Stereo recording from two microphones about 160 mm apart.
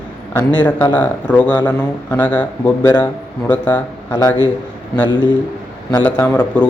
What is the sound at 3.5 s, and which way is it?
Speech, 10° left (ahead or behind).